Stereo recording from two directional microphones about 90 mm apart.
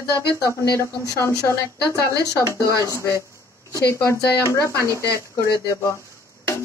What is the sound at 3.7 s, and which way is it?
Speech, 35° left (ahead or behind).